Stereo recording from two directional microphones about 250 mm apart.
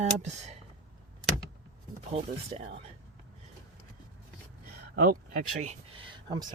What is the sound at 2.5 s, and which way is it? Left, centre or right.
Speech, right.